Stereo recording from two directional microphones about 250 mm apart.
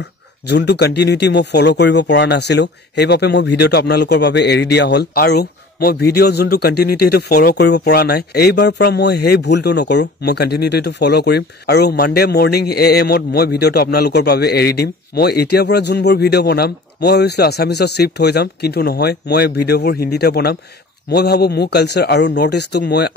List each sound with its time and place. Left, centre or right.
0.5 s speech: left